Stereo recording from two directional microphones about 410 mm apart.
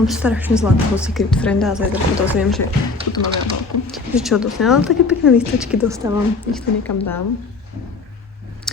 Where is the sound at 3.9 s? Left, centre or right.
Centre.